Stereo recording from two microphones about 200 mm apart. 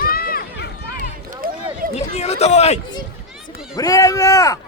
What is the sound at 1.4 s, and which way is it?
Run, 45° right (ahead or behind).